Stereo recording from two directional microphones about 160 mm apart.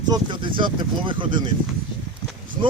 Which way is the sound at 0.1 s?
30° right (ahead or behind).